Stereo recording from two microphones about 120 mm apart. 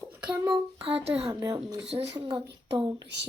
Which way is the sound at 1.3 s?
30° right (ahead or behind).